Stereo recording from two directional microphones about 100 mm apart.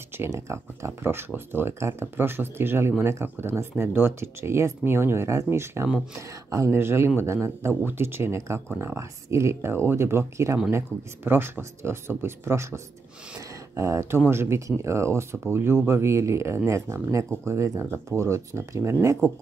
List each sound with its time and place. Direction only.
0.3 s speech: 30° right (ahead or behind)